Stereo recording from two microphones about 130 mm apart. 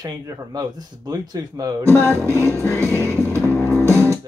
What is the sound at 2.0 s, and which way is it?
Music, 20° left (ahead or behind).